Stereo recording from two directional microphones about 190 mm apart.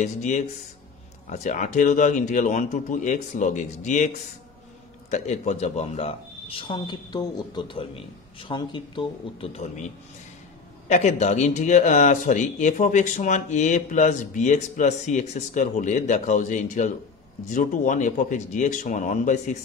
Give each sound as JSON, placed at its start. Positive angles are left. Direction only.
{"t": 0.0, "sound": "a man's voice", "side_deg": 40}
{"t": 5.1, "sound": "a man's voice", "side_deg": 40}